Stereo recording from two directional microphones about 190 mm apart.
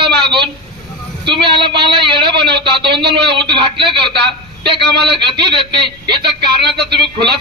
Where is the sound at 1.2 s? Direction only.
65° right (ahead or behind).